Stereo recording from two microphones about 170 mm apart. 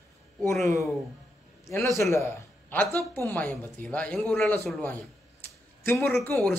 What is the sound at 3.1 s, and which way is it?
A man's voice, 10° left (ahead or behind).